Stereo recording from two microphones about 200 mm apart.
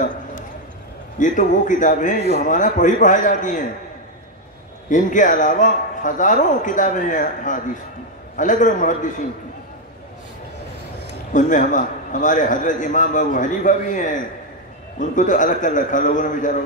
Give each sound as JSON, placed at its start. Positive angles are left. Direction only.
{"t": 0.0, "sound": "a sound", "side_deg": 40}
{"t": 1.2, "sound": "a man's voice", "side_deg": 40}
{"t": 4.8, "sound": "a man's voice", "side_deg": 40}
{"t": 11.3, "sound": "a man's voice", "side_deg": 40}